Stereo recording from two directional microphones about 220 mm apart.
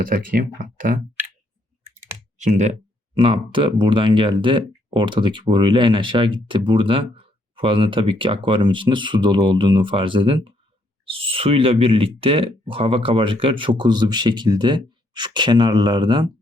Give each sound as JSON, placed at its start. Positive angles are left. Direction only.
{"t": 0.0, "sound": "speech", "side_deg": -40}
{"t": 2.4, "sound": "speech", "side_deg": -35}